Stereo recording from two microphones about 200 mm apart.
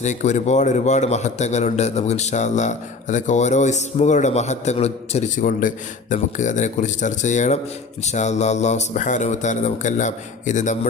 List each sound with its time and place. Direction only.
0.0 s a man's voice: 35° left (ahead or behind)
5.4 s a man's voice: 45° left (ahead or behind)